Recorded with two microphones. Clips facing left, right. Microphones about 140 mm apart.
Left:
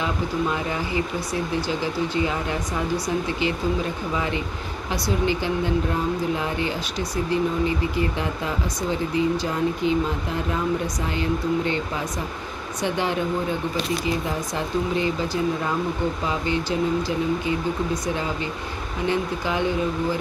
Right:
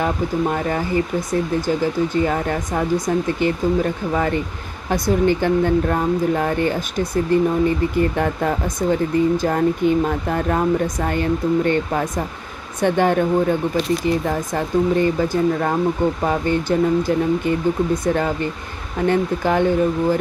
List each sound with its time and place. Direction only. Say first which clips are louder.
0.0 s speech: right 5 dB; 50° right (ahead or behind)